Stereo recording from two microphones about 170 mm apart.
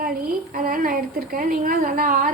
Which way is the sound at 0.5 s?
55° right (ahead or behind).